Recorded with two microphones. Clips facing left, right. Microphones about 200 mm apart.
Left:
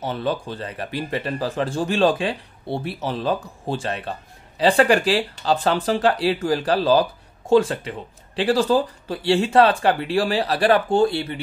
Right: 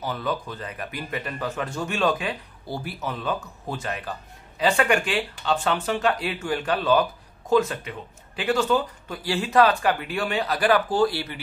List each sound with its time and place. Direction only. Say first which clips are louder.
0.0 s a man's voice: left 4 dB; 30° left (ahead or behind)